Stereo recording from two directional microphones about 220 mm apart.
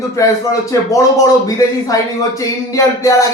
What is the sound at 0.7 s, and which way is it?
Speech, 15° left (ahead or behind).